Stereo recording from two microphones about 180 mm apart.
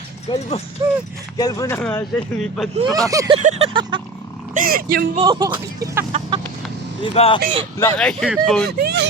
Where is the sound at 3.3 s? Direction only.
35° right (ahead or behind).